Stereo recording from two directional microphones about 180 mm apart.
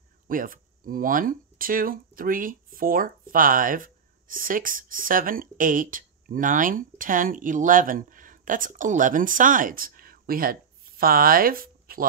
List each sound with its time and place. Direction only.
0.3 s speech: 50° right (ahead or behind)